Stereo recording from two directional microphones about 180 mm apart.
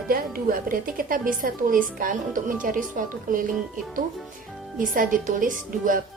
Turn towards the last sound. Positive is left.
turn(degrees=-50)  # may be behind; listen again after turning